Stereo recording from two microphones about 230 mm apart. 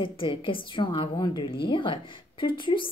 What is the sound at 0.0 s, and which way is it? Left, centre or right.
Speech, left.